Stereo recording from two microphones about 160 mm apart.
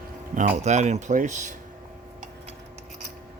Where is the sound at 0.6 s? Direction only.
45° right (ahead or behind).